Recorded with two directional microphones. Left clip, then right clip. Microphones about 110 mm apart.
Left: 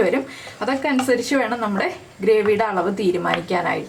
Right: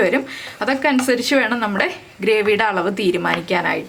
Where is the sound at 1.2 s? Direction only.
40° right (ahead or behind).